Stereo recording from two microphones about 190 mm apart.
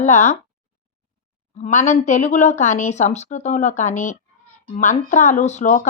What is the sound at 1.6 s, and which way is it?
A woman's voice, 35° left (ahead or behind).